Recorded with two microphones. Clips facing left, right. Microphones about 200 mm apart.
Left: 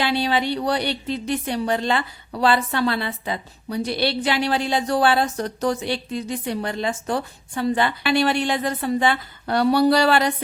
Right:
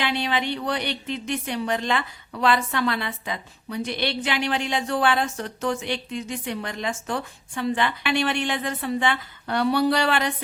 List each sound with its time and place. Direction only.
0.0 s a woman's voice: 35° left (ahead or behind)